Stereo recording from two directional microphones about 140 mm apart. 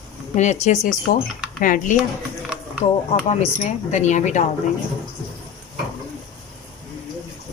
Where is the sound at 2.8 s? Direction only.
40° left (ahead or behind).